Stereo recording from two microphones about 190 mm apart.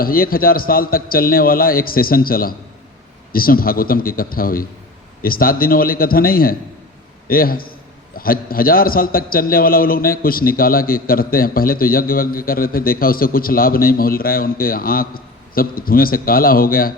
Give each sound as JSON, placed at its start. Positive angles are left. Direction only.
{"t": 0.0, "sound": "a man's voice", "side_deg": 50}